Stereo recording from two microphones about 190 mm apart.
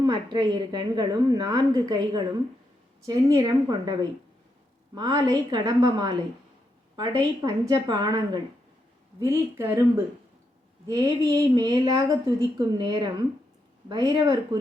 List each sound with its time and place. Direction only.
0.0 s a woman's voice: 25° right (ahead or behind)
4.9 s a woman's voice: 20° right (ahead or behind)
7.4 s a woman's voice: 20° right (ahead or behind)
10.8 s a woman's voice: 20° right (ahead or behind)